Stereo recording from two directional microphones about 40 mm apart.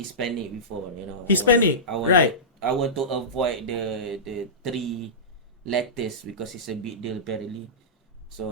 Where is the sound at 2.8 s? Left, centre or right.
Centre.